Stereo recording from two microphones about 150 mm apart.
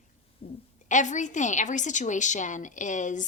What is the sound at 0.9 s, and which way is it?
A woman's voice, 55° left (ahead or behind).